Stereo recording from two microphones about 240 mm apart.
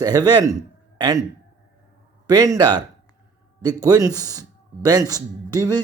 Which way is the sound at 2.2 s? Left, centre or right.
Centre.